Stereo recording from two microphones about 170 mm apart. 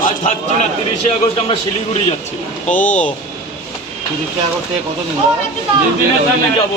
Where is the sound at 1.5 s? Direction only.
35° left (ahead or behind).